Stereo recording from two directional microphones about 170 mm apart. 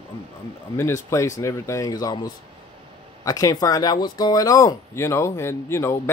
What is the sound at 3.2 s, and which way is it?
Speech, 20° left (ahead or behind).